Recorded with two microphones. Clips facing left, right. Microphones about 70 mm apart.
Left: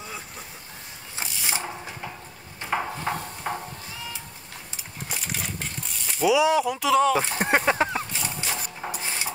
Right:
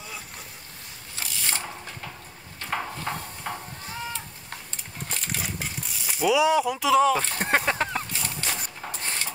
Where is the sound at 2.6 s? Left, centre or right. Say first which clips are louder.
Left 3 dB; centre.